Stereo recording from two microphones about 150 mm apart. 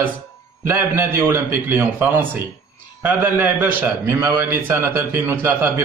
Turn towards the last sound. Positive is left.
turn(degrees=-15)  # may be behind; listen again after turning